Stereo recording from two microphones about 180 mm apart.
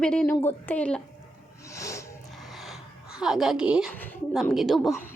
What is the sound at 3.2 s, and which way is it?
A woman's voice, centre (ahead or behind).